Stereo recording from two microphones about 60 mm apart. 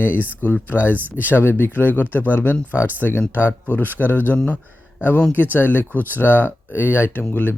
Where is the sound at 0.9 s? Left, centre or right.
Right.